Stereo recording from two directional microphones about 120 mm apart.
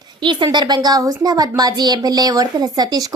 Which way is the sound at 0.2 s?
40° right (ahead or behind).